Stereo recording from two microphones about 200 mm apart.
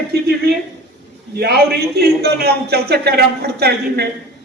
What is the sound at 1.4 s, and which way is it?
A man's voice, 55° right (ahead or behind).